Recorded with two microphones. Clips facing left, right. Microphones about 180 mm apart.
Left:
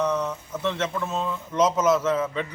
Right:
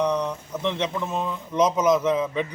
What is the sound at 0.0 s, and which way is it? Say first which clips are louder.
A man's voice: right 1 dB; 15° right (ahead or behind).